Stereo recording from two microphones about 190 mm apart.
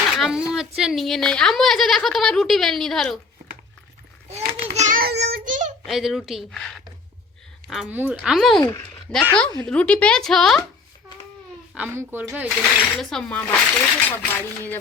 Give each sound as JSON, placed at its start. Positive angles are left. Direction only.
{"t": 0.2, "sound": "speech", "side_deg": -5}
{"t": 4.3, "sound": "a child's voice", "side_deg": -35}
{"t": 5.5, "sound": "a child's voice", "side_deg": -40}
{"t": 5.8, "sound": "speech", "side_deg": 0}
{"t": 8.6, "sound": "a child's voice", "side_deg": 10}
{"t": 11.7, "sound": "speech", "side_deg": -10}
{"t": 12.5, "sound": "speech", "side_deg": 0}